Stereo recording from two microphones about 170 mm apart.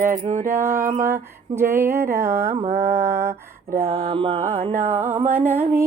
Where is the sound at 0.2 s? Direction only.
40° right (ahead or behind).